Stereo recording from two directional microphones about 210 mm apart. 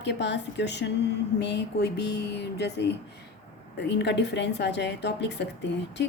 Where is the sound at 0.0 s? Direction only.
55° left (ahead or behind).